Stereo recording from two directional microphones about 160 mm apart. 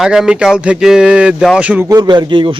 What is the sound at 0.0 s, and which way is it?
Speech, 5° right (ahead or behind).